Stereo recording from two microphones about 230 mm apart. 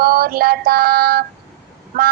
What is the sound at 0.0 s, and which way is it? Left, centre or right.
Female singing, right.